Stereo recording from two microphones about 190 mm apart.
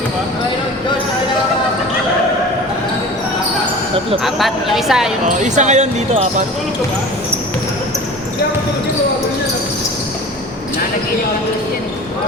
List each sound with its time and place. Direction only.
4.2 s speech: centre (ahead or behind)
5.4 s speech: 40° right (ahead or behind)